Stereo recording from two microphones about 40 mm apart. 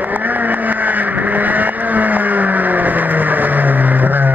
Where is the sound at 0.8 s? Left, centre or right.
Right.